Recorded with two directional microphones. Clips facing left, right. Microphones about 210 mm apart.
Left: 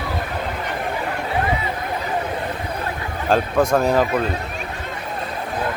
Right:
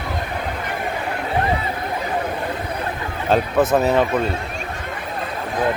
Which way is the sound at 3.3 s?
5° right (ahead or behind).